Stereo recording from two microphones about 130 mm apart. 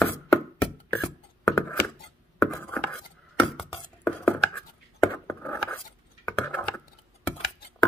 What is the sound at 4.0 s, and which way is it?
Chopping, 15° left (ahead or behind).